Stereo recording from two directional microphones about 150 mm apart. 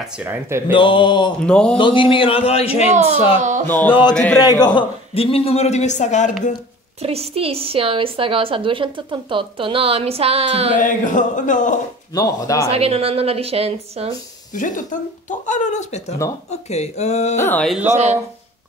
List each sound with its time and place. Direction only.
0.2 s speech: 15° right (ahead or behind)
0.7 s a man's voice: 35° left (ahead or behind)
1.4 s speech: 5° left (ahead or behind)
1.8 s a man's voice: 35° left (ahead or behind)
3.3 s speech: 60° right (ahead or behind)
3.6 s a man's voice: 10° left (ahead or behind)
4.4 s a man's voice: 25° left (ahead or behind); by 6.3 s 55° left (ahead or behind)
7.0 s a woman's voice: 40° right (ahead or behind)
10.8 s speech: 60° left (ahead or behind)
12.1 s speech: 25° left (ahead or behind)
12.7 s a woman's voice: 40° right (ahead or behind)
14.5 s speech: 60° left (ahead or behind)
17.4 s speech: 15° left (ahead or behind)
17.8 s speech: 50° right (ahead or behind)